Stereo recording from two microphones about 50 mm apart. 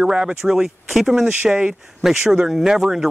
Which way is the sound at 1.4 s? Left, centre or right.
Centre.